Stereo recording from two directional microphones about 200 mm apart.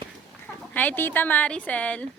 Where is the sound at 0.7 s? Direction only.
10° left (ahead or behind).